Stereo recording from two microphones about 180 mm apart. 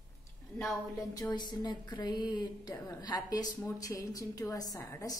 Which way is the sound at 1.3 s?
25° left (ahead or behind).